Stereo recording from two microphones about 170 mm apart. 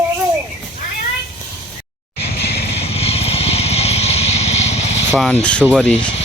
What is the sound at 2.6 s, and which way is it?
Music, 35° left (ahead or behind).